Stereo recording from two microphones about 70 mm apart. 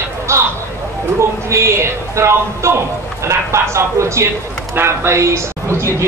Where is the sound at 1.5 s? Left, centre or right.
Right.